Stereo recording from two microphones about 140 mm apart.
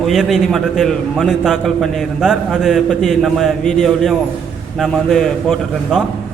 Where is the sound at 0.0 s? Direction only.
Centre (ahead or behind).